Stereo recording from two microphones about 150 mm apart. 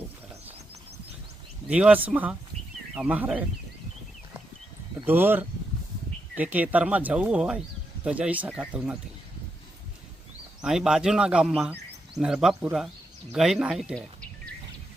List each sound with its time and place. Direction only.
1.7 s speech: 10° right (ahead or behind)
5.0 s speech: 15° right (ahead or behind)
10.6 s speech: 5° right (ahead or behind)